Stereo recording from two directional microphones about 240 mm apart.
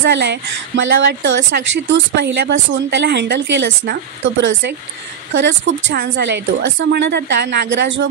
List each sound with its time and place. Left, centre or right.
0.0 s speech: right